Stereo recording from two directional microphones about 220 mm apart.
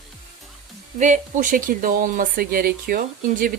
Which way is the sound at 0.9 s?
35° right (ahead or behind).